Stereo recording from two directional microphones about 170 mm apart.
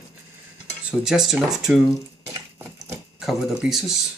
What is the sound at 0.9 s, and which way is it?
Speech, 5° right (ahead or behind).